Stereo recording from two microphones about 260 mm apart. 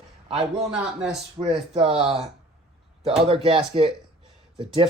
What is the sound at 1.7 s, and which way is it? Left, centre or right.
Speech, right.